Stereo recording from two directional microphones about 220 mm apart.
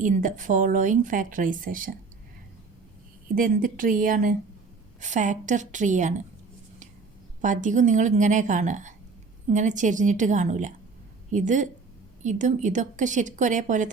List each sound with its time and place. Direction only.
0.0 s speech: 35° right (ahead or behind)
3.3 s speech: 40° right (ahead or behind)
7.4 s speech: 35° right (ahead or behind)